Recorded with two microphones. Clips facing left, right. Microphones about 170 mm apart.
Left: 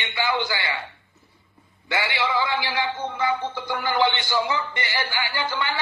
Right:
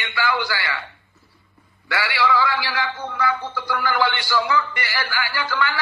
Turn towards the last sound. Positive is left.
turn(degrees=20)  # may be behind; listen again after turning